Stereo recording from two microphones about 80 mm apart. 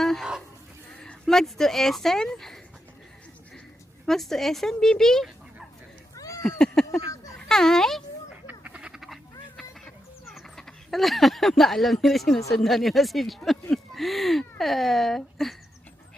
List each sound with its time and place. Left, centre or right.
0.0 s livestock: centre
0.9 s speech: centre
4.0 s speech: centre
6.1 s cat: left
6.6 s a child's voice: centre
8.4 s duck: centre
9.6 s fowl: centre
10.9 s speech: centre